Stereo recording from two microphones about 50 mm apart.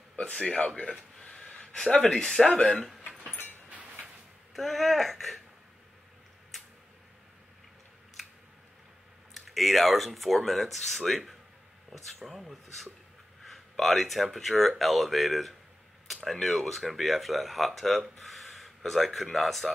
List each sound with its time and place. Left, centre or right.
0.3 s speech: left
1.2 s a sound: centre
1.9 s speech: left
2.1 s speech: centre
4.6 s speech: centre
9.3 s speech: centre